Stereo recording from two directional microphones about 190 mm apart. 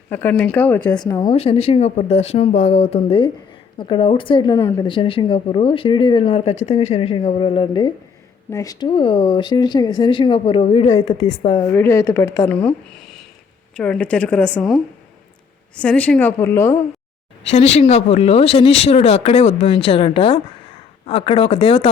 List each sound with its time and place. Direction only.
0.1 s speech: 10° left (ahead or behind)
0.9 s a woman's voice: 20° left (ahead or behind)
1.4 s a woman's voice: 30° left (ahead or behind)
11.5 s a woman's voice: 10° left (ahead or behind)
17.5 s a woman's voice: 35° left (ahead or behind)